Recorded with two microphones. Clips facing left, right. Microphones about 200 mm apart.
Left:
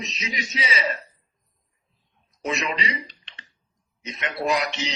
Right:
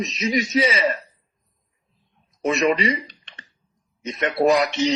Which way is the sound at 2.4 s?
50° right (ahead or behind).